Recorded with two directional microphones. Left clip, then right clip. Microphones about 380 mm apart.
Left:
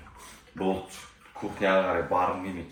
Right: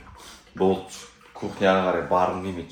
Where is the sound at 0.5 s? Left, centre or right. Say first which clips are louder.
Right 8 dB; right.